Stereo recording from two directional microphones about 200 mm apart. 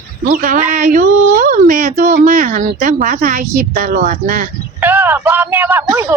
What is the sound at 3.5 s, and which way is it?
Speech, 45° right (ahead or behind).